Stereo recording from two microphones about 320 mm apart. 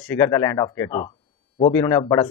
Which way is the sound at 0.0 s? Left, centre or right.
Centre.